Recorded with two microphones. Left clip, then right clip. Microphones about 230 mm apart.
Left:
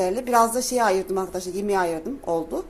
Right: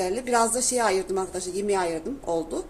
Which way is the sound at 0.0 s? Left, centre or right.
Centre.